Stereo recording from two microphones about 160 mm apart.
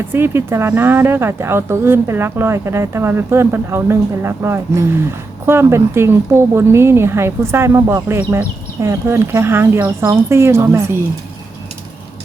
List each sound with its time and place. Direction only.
0.1 s a woman's voice: 15° right (ahead or behind)